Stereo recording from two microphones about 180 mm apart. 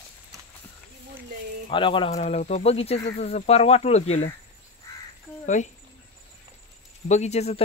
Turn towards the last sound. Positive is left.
turn(degrees=35)  # may be behind; listen again after turning